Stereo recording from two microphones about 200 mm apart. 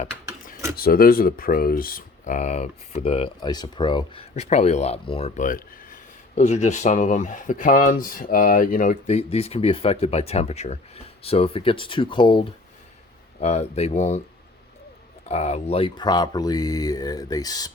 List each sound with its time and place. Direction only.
0.8 s speech: 50° left (ahead or behind); by 5.3 s 30° left (ahead or behind)
5.4 s speech: 45° left (ahead or behind)
15.3 s speech: 30° left (ahead or behind)